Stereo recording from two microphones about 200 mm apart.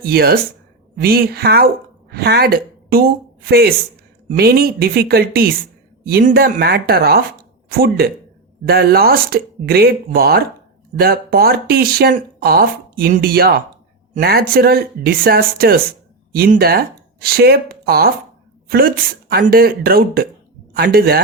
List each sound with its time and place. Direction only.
0.0 s a woman's voice: 50° right (ahead or behind)